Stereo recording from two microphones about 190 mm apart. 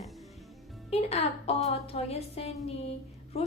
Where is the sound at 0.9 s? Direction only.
30° left (ahead or behind).